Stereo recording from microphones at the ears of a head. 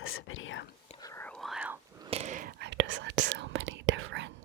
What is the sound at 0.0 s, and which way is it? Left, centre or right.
Whispering, left.